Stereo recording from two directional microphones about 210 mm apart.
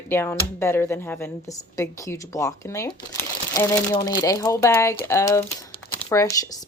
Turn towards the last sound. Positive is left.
turn(degrees=15)  # may be behind; listen again after turning